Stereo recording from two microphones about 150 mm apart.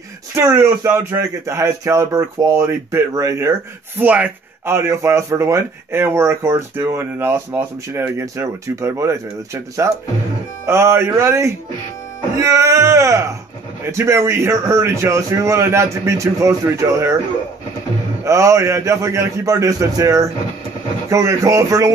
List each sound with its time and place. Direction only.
0.3 s speech: 20° right (ahead or behind)
18.2 s speech: 20° right (ahead or behind)